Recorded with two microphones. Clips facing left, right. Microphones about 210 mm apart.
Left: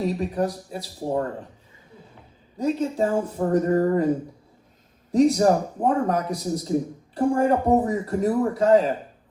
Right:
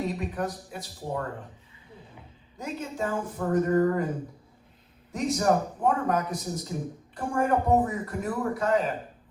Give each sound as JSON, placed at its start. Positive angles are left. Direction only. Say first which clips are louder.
{"t": 0.0, "sound": "a man's voice", "louder": "left 6 dB", "side_deg": 30}
{"t": 2.6, "sound": "a man's voice", "louder": "left 9 dB", "side_deg": 35}
{"t": 5.1, "sound": "a man's voice", "louder": "left 7 dB", "side_deg": 30}